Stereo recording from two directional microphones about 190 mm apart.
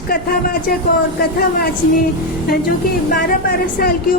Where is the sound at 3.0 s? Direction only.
50° left (ahead or behind).